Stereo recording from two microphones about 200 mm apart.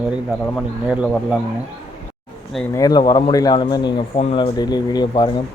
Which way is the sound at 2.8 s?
20° left (ahead or behind).